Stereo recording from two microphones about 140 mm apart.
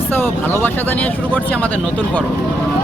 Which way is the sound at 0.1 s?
15° left (ahead or behind).